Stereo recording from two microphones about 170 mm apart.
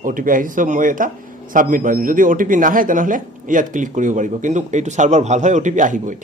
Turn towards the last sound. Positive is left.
turn(degrees=-50)  # may be behind; listen again after turning